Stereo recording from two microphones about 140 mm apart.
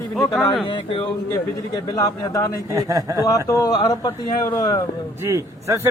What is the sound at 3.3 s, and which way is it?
Speech, 25° left (ahead or behind).